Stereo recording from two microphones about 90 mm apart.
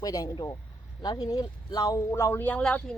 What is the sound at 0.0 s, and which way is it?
Speech, 45° left (ahead or behind).